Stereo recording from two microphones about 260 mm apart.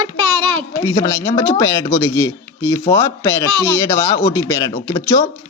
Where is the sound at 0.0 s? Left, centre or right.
Centre.